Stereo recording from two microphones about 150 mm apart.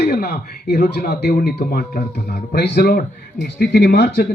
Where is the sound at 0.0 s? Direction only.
90° left.